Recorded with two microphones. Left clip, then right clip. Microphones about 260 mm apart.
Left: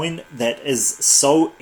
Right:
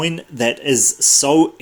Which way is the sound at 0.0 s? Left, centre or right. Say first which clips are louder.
Right 3 dB; right.